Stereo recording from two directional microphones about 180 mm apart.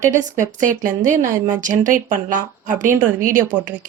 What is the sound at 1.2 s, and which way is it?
Speech, 10° right (ahead or behind).